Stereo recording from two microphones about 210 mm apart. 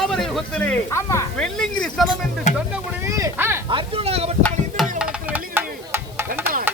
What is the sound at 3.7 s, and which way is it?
Speech, 30° right (ahead or behind).